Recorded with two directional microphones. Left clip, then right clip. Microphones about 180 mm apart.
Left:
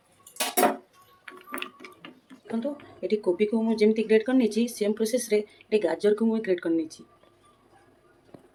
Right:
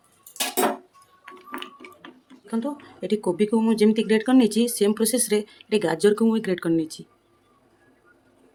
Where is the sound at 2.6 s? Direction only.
50° right (ahead or behind).